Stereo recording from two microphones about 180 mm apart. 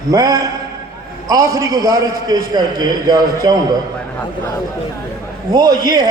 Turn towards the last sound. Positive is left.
turn(degrees=-20)  # may be behind; listen again after turning